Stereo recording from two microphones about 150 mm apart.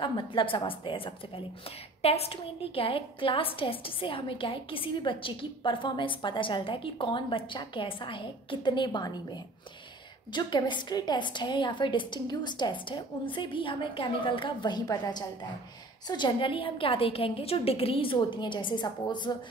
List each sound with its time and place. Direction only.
0.0 s a woman's voice: 35° left (ahead or behind)